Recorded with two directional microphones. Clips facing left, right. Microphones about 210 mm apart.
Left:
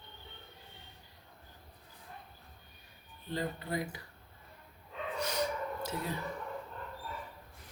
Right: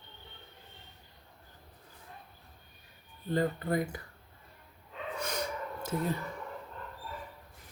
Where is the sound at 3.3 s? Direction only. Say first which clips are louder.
Right 6 dB; 50° right (ahead or behind).